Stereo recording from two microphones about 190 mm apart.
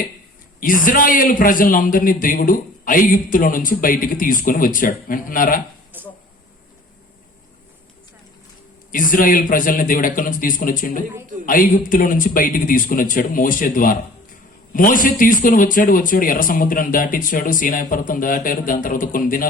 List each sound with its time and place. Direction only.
0.6 s a man's voice: 45° left (ahead or behind)
5.9 s a sound: 10° right (ahead or behind)
8.9 s a man's voice: 45° left (ahead or behind)